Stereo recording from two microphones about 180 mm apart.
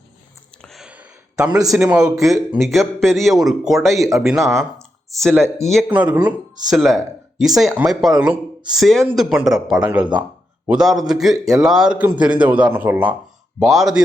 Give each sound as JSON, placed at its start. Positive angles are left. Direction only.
{"t": 0.6, "sound": "a sound", "side_deg": 0}
{"t": 1.5, "sound": "a man's voice", "side_deg": -20}
{"t": 1.7, "sound": "speech", "side_deg": -5}
{"t": 5.6, "sound": "a man's voice", "side_deg": -5}